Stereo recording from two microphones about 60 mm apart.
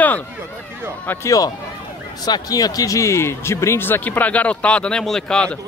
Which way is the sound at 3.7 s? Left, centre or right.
Left.